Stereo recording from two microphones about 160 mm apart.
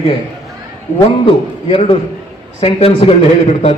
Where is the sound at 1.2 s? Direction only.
35° left (ahead or behind).